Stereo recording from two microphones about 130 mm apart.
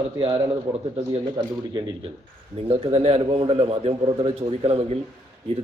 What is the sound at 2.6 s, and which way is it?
A man's voice, 55° right (ahead or behind).